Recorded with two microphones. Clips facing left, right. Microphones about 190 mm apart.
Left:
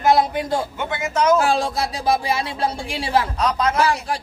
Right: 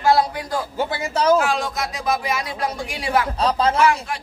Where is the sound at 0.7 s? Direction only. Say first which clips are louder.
Even; 35° right (ahead or behind).